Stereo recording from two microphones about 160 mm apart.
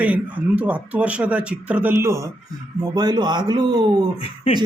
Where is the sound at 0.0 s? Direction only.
10° right (ahead or behind).